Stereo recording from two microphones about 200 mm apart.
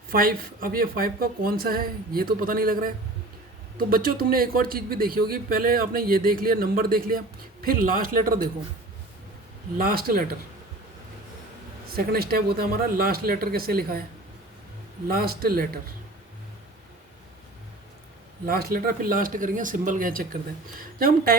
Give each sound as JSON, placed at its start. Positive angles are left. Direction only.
{"t": 0.1, "sound": "a man's voice", "side_deg": -45}
{"t": 9.7, "sound": "a man's voice", "side_deg": -45}
{"t": 11.9, "sound": "a man's voice", "side_deg": -50}
{"t": 15.0, "sound": "a man's voice", "side_deg": -45}
{"t": 18.4, "sound": "a man's voice", "side_deg": -45}